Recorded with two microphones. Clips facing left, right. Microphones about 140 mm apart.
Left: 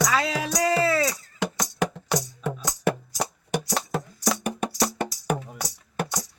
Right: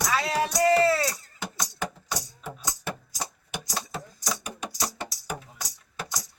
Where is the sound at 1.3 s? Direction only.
80° left; by 5.4 s 60° left (ahead or behind).